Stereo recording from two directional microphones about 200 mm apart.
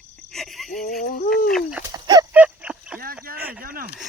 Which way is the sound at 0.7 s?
45° left (ahead or behind).